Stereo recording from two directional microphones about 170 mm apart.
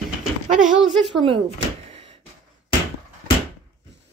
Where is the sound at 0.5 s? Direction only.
5° right (ahead or behind).